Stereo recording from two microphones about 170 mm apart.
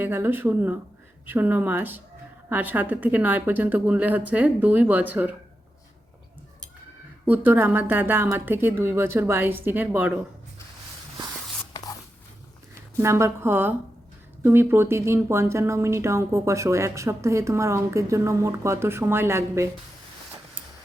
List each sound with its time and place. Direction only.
0.0 s speech: 10° right (ahead or behind)
7.3 s speech: 10° right (ahead or behind)
13.0 s speech: 15° right (ahead or behind)